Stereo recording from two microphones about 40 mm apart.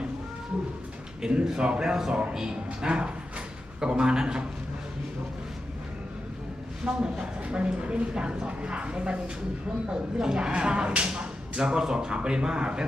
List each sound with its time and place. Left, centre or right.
1.2 s a man's voice: right
2.8 s speech: right
6.8 s speech: right